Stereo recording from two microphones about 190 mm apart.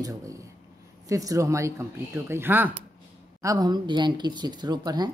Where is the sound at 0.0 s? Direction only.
15° right (ahead or behind).